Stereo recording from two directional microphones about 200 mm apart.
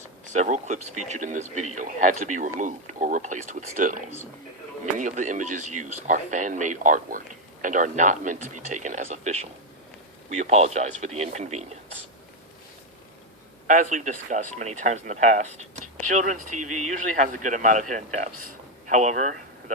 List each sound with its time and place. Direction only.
0.3 s speech: 35° right (ahead or behind)
13.7 s speech: 40° right (ahead or behind)